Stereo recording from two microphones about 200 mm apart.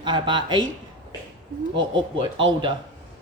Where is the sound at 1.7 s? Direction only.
25° right (ahead or behind).